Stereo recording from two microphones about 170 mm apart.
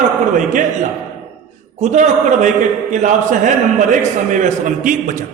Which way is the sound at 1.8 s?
45° right (ahead or behind).